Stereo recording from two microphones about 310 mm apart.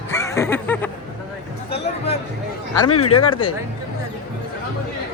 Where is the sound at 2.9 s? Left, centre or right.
Left.